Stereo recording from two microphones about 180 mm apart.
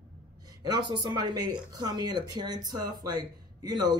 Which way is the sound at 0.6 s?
25° right (ahead or behind).